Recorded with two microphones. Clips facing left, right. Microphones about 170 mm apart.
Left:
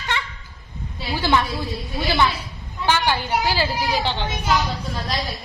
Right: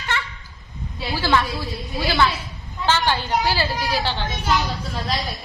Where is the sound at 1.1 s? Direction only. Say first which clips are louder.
Even; 20° left (ahead or behind).